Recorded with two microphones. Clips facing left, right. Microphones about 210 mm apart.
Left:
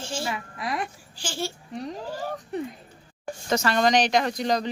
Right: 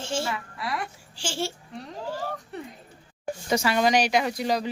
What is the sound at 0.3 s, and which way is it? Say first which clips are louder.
Speech: left 1 dB; 20° left (ahead or behind).